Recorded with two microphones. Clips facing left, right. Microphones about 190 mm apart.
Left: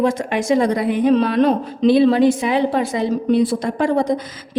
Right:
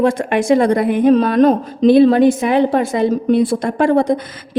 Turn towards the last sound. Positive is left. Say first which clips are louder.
# right 3 dB
turn(degrees=-55)  # may be behind; listen again after turning